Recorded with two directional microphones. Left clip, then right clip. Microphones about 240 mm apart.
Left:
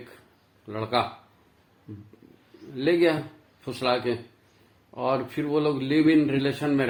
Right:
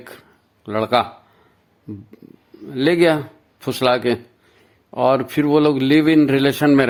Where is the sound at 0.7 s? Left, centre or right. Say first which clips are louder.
Right 9 dB; right.